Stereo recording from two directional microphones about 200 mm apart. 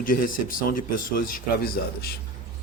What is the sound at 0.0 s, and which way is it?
A man's voice, 45° left (ahead or behind).